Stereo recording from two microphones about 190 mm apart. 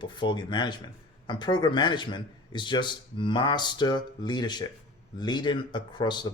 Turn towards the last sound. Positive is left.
turn(degrees=25)  # may be behind; listen again after turning